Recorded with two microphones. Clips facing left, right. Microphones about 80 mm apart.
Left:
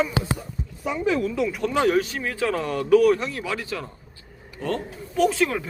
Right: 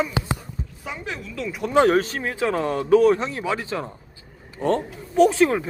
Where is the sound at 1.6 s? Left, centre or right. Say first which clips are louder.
Right 5 dB; right.